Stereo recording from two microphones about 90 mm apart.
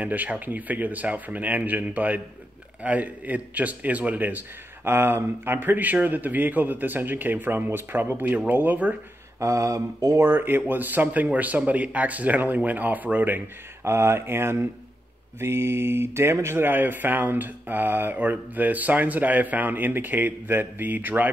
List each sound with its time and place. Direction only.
0.0 s speech: 15° right (ahead or behind)
9.4 s mantra: 35° right (ahead or behind)
10.2 s speech: 25° right (ahead or behind)
13.8 s speech: 30° right (ahead or behind)